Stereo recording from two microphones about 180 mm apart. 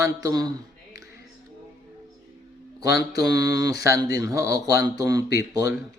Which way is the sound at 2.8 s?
20° right (ahead or behind).